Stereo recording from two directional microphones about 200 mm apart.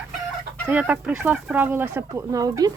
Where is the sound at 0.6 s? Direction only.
10° right (ahead or behind).